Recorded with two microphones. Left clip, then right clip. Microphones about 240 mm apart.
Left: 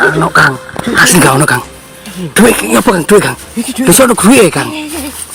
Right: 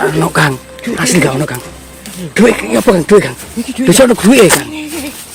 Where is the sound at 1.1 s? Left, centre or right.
Left.